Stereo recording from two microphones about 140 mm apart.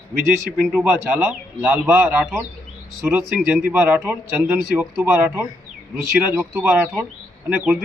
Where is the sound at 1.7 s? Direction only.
20° right (ahead or behind).